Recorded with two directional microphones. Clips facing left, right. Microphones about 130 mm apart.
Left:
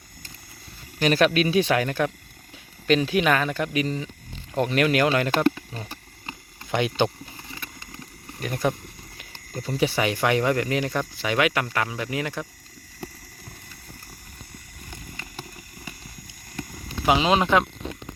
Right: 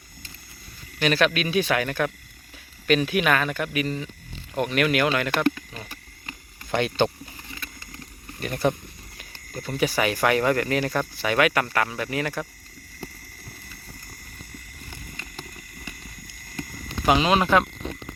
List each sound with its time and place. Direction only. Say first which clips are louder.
0.9 s speech: left 2 dB; 35° left (ahead or behind)
5.7 s a sound: left 2 dB; 30° left (ahead or behind)
6.7 s a sound: even; 15° left (ahead or behind)
8.4 s speech: right 1 dB; centre (ahead or behind)
9.3 s speech: left 2 dB; 25° left (ahead or behind)
17.1 s speech: even; 20° left (ahead or behind)